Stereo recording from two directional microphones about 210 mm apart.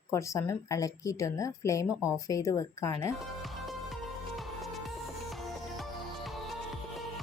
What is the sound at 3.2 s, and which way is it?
Music, centre (ahead or behind).